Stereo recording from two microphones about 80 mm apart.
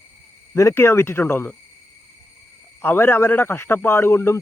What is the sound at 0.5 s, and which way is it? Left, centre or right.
Speech, left.